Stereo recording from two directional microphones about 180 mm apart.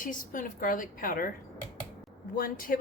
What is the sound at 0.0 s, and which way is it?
Speech, 45° left (ahead or behind).